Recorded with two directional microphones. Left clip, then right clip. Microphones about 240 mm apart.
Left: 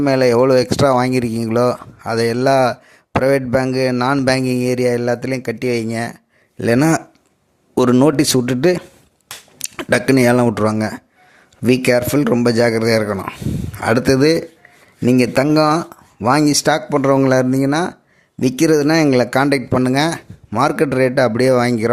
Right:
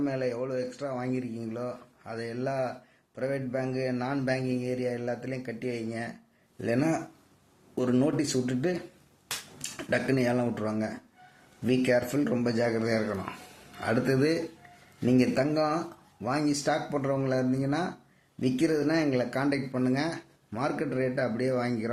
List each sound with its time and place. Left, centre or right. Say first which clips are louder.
0.0 s speech: left 18 dB; left